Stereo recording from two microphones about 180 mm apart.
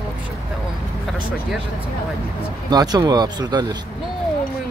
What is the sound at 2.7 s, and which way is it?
Speech, 20° right (ahead or behind).